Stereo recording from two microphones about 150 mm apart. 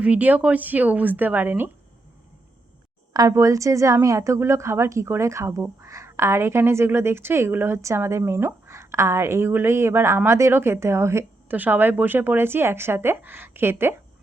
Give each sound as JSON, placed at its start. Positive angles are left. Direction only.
{"t": 0.0, "sound": "a woman's voice", "side_deg": -10}
{"t": 3.1, "sound": "a woman's voice", "side_deg": -25}